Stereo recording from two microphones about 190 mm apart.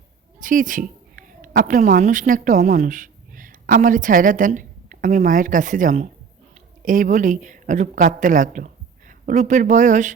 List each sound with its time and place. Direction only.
0.3 s a woman's voice: 45° right (ahead or behind)